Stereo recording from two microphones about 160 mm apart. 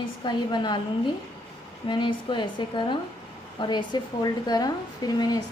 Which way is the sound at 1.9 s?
30° left (ahead or behind).